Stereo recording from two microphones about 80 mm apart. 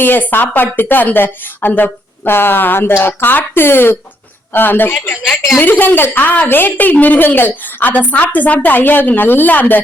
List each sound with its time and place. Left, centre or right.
0.0 s a woman's voice: left